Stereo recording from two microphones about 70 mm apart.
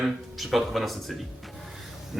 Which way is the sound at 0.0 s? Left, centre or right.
Centre.